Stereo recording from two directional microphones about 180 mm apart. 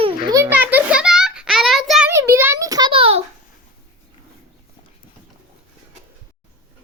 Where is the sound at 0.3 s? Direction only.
20° right (ahead or behind).